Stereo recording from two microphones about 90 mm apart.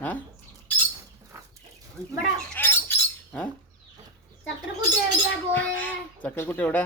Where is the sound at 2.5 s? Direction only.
20° left (ahead or behind).